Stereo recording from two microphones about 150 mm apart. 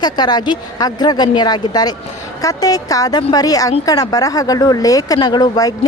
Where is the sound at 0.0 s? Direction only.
30° left (ahead or behind).